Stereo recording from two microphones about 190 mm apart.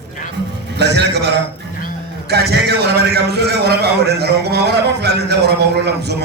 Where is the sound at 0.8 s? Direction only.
65° right (ahead or behind).